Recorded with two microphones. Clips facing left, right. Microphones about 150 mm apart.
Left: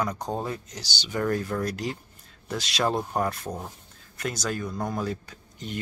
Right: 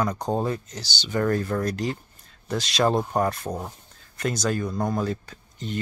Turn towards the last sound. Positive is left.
turn(degrees=10)  # may be behind; listen again after turning